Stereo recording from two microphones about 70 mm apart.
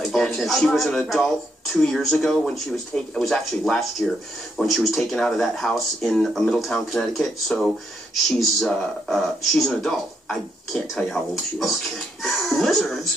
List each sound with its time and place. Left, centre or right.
0.0 s speech: centre